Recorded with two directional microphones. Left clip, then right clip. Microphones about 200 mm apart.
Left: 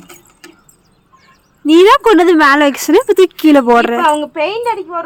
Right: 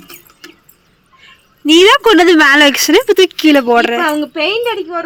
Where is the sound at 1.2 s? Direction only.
5° left (ahead or behind).